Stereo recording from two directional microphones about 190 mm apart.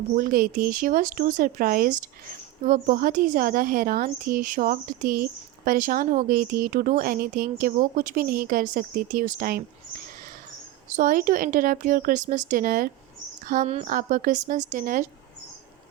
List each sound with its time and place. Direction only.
0.2 s speech: 50° right (ahead or behind)
10.8 s speech: 40° right (ahead or behind)